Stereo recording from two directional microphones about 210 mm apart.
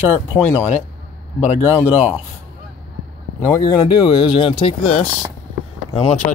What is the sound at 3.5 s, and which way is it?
Speech, 20° left (ahead or behind).